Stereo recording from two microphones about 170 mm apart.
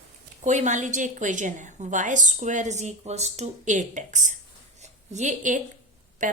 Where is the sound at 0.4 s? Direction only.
45° right (ahead or behind).